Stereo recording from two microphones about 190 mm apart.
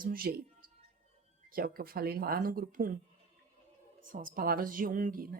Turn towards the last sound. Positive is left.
turn(degrees=-50)  # may be behind; listen again after turning